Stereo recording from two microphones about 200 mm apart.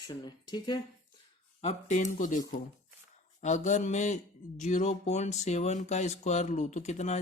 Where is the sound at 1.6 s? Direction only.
35° left (ahead or behind).